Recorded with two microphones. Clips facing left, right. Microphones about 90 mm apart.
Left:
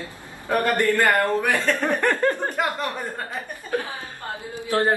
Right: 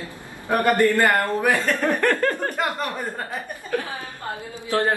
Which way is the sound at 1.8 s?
20° left (ahead or behind).